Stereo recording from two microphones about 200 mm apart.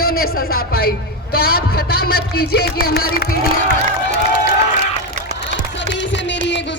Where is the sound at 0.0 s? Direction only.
50° left (ahead or behind).